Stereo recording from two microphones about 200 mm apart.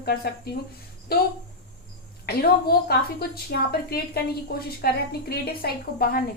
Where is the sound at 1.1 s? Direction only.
50° left (ahead or behind).